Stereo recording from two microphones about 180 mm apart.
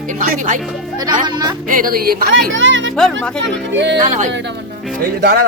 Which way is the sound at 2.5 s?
90° right.